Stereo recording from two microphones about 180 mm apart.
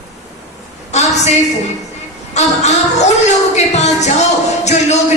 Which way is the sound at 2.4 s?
40° left (ahead or behind).